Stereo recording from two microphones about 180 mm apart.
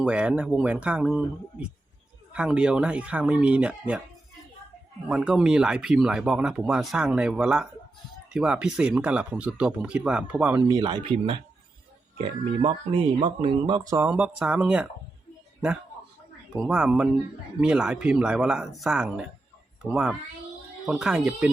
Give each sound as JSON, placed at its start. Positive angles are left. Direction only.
{"t": 0.0, "sound": "speech", "side_deg": -5}
{"t": 2.3, "sound": "speech", "side_deg": -5}
{"t": 5.0, "sound": "speech", "side_deg": -5}
{"t": 10.7, "sound": "speech", "side_deg": -25}
{"t": 14.0, "sound": "speech", "side_deg": -5}
{"t": 16.6, "sound": "speech", "side_deg": -5}